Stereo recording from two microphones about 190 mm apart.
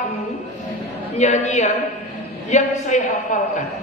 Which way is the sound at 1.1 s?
35° left (ahead or behind).